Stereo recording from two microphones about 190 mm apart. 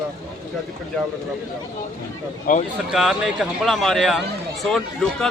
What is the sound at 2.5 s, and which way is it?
Speech, 45° left (ahead or behind).